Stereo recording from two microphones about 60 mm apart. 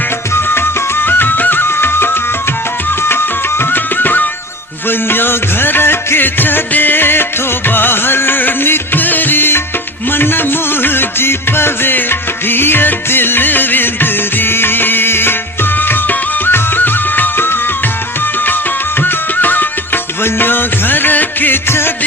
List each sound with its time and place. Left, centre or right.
0.4 s music: left
3.6 s music: left
19.0 s music: left